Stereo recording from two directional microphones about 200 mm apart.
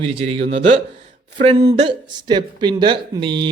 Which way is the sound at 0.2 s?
30° right (ahead or behind).